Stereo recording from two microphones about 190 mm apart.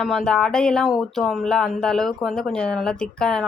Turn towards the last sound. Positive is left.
turn(degrees=5)  # may be behind; listen again after turning